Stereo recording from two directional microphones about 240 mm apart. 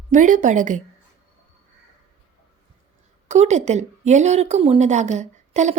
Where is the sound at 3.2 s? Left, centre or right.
Right.